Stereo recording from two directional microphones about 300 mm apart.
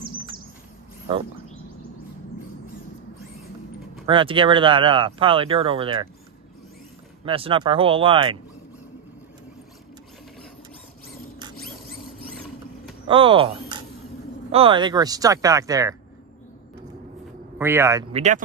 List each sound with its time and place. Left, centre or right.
4.0 s speech: centre
7.2 s speech: centre
13.0 s speech: centre
17.6 s speech: centre
18.1 s speech: right